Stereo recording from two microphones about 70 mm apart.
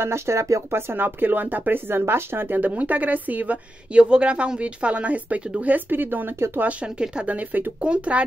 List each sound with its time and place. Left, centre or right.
0.0 s speech: right
6.7 s speech: centre